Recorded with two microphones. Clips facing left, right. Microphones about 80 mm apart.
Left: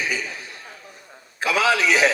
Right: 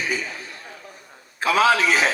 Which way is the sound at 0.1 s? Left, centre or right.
Right.